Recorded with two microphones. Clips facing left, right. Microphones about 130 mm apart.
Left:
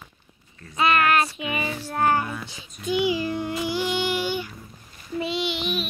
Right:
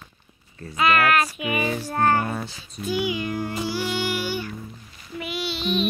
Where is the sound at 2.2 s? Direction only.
40° right (ahead or behind).